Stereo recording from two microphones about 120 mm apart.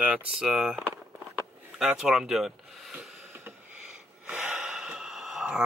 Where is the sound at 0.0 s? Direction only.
10° right (ahead or behind).